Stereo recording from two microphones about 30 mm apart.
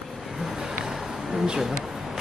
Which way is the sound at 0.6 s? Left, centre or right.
Right.